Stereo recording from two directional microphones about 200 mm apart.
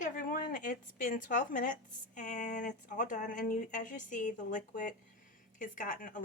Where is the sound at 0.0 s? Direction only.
40° left (ahead or behind).